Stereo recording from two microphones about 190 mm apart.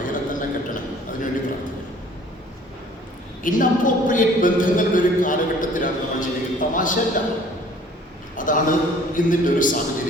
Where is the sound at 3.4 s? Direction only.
45° left (ahead or behind).